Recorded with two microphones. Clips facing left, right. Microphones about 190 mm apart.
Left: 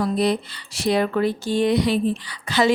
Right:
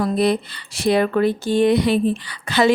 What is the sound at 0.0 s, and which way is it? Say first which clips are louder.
Speech: right 2 dB; 55° right (ahead or behind).